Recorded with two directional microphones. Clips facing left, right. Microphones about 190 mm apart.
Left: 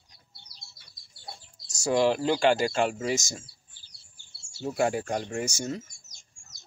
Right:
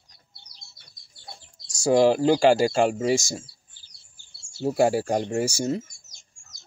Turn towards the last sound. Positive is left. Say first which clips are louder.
# right 7 dB
turn(degrees=-35)  # may be behind; listen again after turning